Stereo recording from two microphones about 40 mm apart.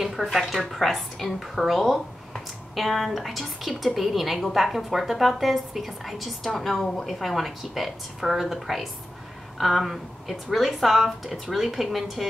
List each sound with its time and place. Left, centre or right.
0.0 s a woman's voice: centre